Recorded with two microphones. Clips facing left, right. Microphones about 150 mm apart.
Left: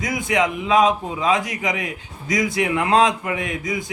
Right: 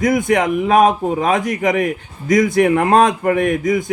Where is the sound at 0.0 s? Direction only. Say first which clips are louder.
Right 6 dB; 50° right (ahead or behind).